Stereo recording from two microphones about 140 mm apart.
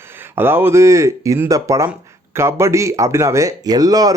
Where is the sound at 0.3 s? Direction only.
15° right (ahead or behind).